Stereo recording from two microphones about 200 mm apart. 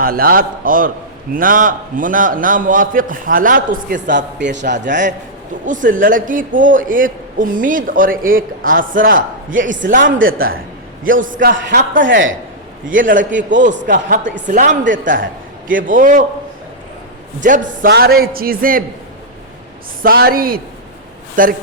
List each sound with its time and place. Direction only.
0.0 s a man's voice: 45° right (ahead or behind)
4.4 s a man's voice: 60° right (ahead or behind)
4.6 s a man's voice: 40° right (ahead or behind)
12.0 s speech: 70° right (ahead or behind)
13.1 s speech: 40° right (ahead or behind)
17.4 s speech: 40° right (ahead or behind)
17.9 s a man's voice: 50° right (ahead or behind)
20.0 s a man's voice: 50° right (ahead or behind)